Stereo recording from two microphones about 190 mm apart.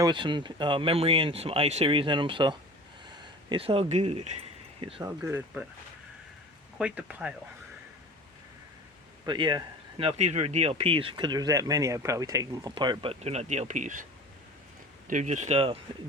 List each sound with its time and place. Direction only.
0.0 s speech: 25° right (ahead or behind)
5.2 s speech: 15° right (ahead or behind)
6.7 s speech: 5° right (ahead or behind)
9.2 s speech: 25° right (ahead or behind)